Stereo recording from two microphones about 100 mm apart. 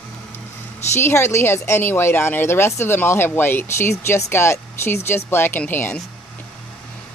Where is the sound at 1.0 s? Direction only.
25° left (ahead or behind).